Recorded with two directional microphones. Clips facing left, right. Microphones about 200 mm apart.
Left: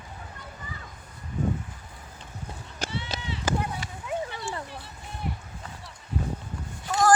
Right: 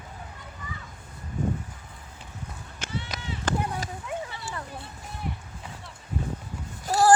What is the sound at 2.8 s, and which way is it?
Run, 35° left (ahead or behind).